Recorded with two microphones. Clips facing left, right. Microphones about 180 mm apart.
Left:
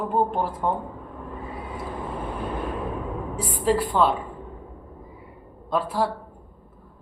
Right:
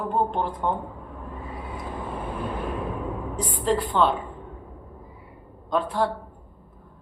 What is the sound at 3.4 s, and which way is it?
Speech, 5° left (ahead or behind).